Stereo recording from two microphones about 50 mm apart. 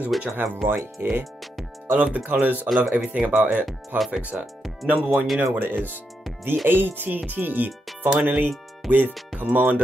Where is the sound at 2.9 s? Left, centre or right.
Centre.